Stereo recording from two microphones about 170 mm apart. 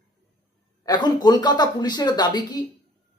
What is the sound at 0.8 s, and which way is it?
A man's voice, 25° left (ahead or behind).